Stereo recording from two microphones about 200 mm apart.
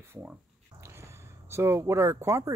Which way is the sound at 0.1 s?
10° right (ahead or behind).